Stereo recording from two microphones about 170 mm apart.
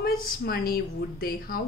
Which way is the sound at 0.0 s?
65° left (ahead or behind).